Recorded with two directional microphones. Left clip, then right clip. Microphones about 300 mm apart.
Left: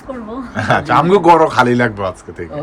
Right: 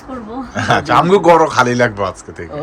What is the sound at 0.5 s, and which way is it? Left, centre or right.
A man's voice, centre.